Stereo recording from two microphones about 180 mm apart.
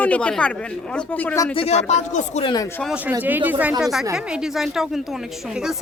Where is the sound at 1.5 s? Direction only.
35° left (ahead or behind).